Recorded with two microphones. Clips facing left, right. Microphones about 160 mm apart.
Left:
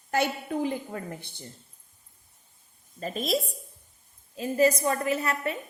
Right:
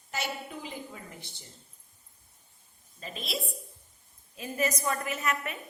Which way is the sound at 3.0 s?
45° left (ahead or behind).